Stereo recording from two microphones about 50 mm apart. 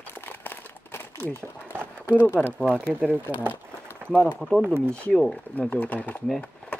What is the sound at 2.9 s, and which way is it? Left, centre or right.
Speech, right.